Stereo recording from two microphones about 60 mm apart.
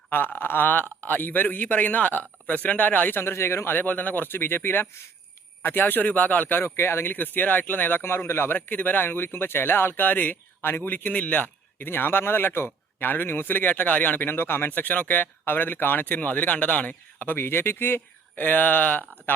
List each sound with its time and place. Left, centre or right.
0.1 s speech: left
3.2 s speech: left
3.8 s speech: left
6.7 s speech: left
8.0 s speech: left
11.9 s speech: left